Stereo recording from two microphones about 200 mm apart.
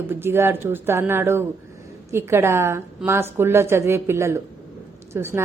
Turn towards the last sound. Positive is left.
turn(degrees=-15)  # may be behind; listen again after turning